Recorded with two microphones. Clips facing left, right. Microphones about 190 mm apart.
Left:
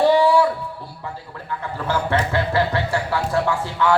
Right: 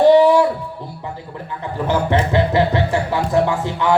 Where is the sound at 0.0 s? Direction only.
20° right (ahead or behind).